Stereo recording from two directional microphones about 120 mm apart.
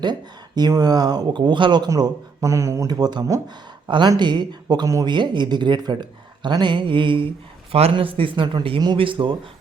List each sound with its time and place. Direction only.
0.0 s speech: 35° right (ahead or behind)
7.7 s speech: 55° right (ahead or behind)